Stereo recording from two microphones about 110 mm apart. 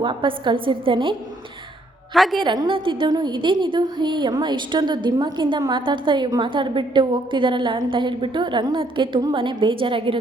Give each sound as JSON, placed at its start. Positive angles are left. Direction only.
{"t": 0.0, "sound": "a woman's voice", "side_deg": -50}
{"t": 2.1, "sound": "a woman's voice", "side_deg": 0}
{"t": 2.4, "sound": "a woman's voice", "side_deg": -45}
{"t": 3.1, "sound": "a woman's voice", "side_deg": -40}